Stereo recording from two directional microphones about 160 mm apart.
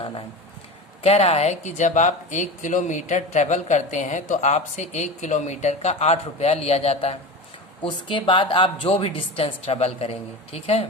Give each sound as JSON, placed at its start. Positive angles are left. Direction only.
{"t": 1.0, "sound": "speech", "side_deg": 40}